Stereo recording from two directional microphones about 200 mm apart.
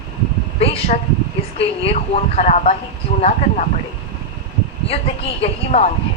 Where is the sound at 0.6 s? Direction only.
30° left (ahead or behind).